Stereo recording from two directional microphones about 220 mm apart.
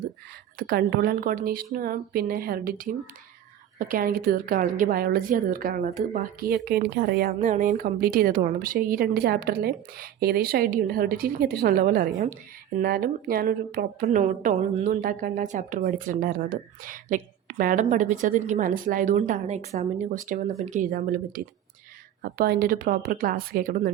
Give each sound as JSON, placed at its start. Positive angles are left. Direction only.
{"t": 0.7, "sound": "speech", "side_deg": -40}